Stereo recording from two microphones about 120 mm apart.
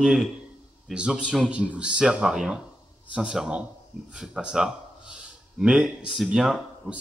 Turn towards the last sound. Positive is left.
turn(degrees=-5)  # may be behind; listen again after turning